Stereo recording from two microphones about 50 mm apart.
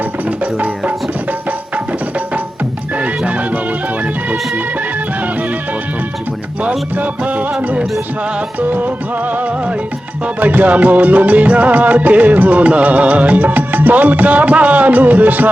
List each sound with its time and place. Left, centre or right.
0.0 s music: right
6.6 s music: right